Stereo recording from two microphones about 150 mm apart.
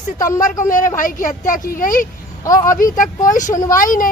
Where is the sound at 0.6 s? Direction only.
60° left (ahead or behind).